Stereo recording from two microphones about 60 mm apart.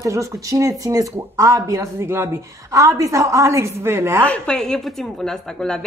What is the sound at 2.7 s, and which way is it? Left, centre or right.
A man's voice, right.